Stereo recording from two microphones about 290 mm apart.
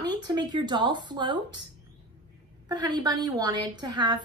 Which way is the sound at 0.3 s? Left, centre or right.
Centre.